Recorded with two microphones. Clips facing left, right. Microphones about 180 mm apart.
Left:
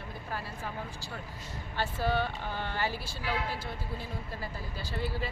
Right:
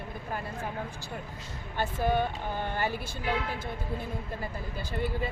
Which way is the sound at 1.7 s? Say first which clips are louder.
Right 3 dB; 15° right (ahead or behind).